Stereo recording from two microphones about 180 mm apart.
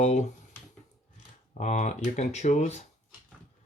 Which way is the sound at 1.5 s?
40° left (ahead or behind).